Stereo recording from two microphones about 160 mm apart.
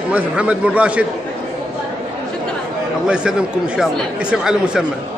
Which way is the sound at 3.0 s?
5° right (ahead or behind).